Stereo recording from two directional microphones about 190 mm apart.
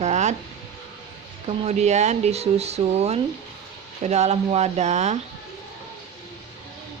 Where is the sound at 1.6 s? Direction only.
35° right (ahead or behind).